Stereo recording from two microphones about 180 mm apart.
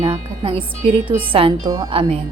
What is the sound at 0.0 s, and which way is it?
A woman's voice, 30° right (ahead or behind).